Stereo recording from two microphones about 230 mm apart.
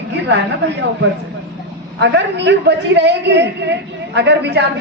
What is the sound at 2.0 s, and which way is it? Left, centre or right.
A woman's voice, right.